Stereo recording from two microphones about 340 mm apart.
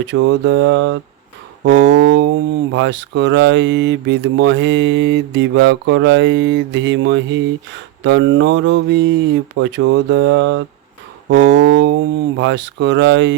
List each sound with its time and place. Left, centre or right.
0.0 s speech: right